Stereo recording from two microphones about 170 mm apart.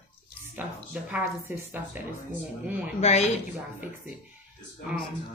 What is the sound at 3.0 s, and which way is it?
Speech, 40° left (ahead or behind).